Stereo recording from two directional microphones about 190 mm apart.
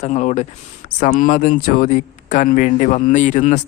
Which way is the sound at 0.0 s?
40° left (ahead or behind).